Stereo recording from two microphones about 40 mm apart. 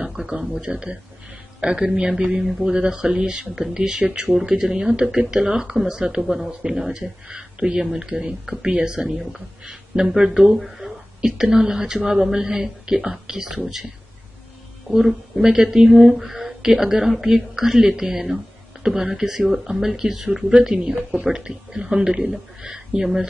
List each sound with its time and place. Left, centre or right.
0.3 s speech: right
4.3 s a woman's voice: centre
6.2 s a woman's voice: centre
6.9 s a woman's voice: centre
14.9 s a woman's voice: centre